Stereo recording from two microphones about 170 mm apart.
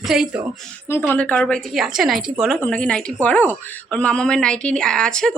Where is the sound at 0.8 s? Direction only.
10° left (ahead or behind).